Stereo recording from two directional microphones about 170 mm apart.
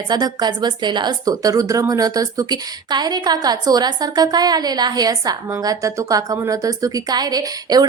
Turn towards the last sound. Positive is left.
turn(degrees=-25)  # may be behind; listen again after turning